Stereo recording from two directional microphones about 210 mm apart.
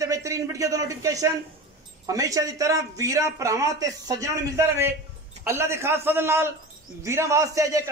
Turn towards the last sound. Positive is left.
turn(degrees=-15)  # may be behind; listen again after turning